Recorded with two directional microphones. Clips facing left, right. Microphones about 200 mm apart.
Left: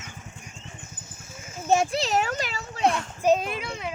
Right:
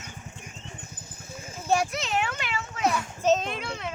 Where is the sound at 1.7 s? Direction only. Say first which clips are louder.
Left 3 dB; 25° left (ahead or behind).